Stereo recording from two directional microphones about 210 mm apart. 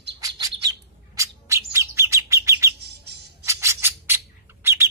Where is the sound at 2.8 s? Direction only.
50° right (ahead or behind).